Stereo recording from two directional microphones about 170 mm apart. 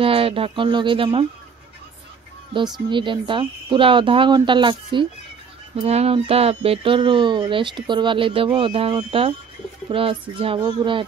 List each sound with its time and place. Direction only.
0.0 s speech: 35° right (ahead or behind)
2.5 s speech: 30° right (ahead or behind)
9.8 s bird: 30° right (ahead or behind)
10.3 s speech: 30° right (ahead or behind)